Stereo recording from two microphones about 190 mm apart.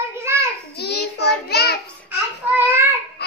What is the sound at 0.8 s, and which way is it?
Child singing, 60° left (ahead or behind).